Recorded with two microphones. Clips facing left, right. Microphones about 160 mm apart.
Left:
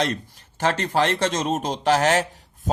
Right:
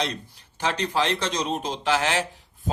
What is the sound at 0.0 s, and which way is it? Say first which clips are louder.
Speech: left 4 dB; 45° left (ahead or behind).